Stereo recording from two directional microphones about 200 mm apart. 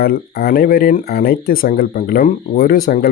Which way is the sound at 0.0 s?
50° left (ahead or behind).